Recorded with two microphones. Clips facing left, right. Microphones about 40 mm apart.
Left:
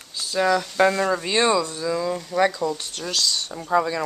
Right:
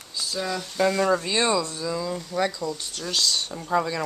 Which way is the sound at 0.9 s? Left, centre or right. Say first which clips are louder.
Even; centre.